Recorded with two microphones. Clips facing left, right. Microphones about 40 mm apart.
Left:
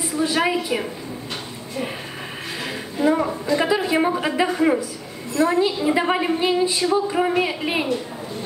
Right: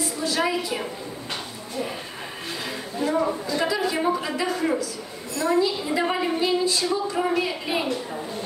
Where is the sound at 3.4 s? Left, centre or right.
Left.